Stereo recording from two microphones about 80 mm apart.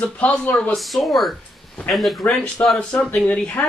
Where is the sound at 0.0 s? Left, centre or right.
Centre.